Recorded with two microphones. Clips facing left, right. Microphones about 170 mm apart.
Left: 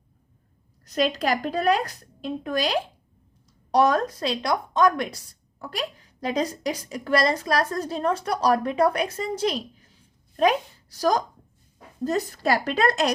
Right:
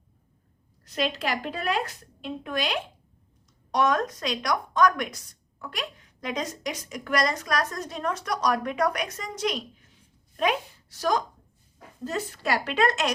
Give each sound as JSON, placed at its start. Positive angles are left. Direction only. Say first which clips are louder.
{"t": 0.9, "sound": "a woman's voice", "louder": "left 5 dB", "side_deg": 40}